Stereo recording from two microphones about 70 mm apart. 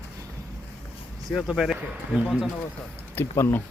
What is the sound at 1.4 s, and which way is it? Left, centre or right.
Speech, centre.